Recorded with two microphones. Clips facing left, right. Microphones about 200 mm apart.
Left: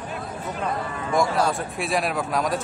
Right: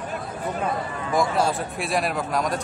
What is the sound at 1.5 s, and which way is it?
A man's voice, centre (ahead or behind).